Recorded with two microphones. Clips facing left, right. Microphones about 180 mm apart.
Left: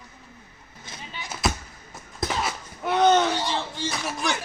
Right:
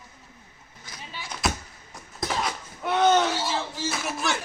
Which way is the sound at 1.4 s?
Centre (ahead or behind).